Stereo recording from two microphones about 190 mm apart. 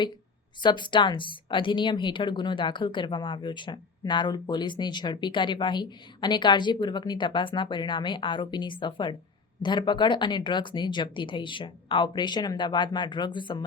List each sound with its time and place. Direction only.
0.6 s a woman's voice: 25° left (ahead or behind)